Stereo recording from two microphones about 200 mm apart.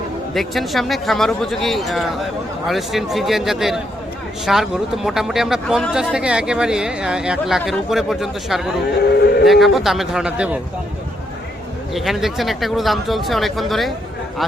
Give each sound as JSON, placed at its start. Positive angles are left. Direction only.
{"t": 0.3, "sound": "speech", "side_deg": 0}
{"t": 9.0, "sound": "speech", "side_deg": 55}
{"t": 9.5, "sound": "speech", "side_deg": 0}
{"t": 11.9, "sound": "speech", "side_deg": 0}